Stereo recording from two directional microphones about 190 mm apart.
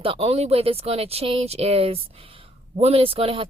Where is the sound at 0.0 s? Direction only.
30° right (ahead or behind).